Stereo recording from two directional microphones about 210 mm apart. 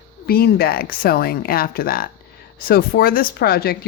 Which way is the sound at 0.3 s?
50° left (ahead or behind).